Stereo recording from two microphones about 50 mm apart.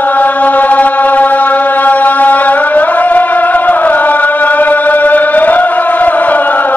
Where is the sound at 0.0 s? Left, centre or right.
Left.